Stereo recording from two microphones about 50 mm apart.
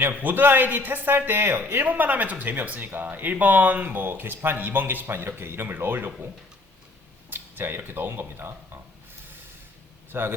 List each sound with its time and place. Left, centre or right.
0.1 s a man's voice: right
7.3 s speech: right
10.1 s a man's voice: right